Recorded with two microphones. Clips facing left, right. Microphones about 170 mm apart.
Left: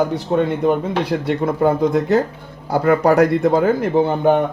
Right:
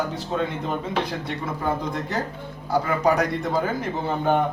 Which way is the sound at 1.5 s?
55° left (ahead or behind).